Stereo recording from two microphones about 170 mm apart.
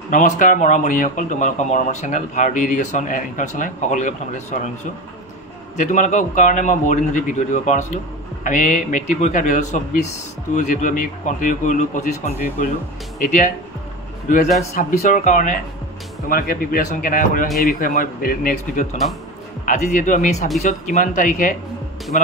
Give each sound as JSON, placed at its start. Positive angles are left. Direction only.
{"t": 0.1, "sound": "speech", "side_deg": 50}
{"t": 5.8, "sound": "speech", "side_deg": 45}
{"t": 14.6, "sound": "speech", "side_deg": 45}
{"t": 16.3, "sound": "speech", "side_deg": 60}